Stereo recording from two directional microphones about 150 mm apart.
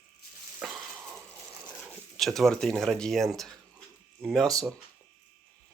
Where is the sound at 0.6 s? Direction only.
10° right (ahead or behind).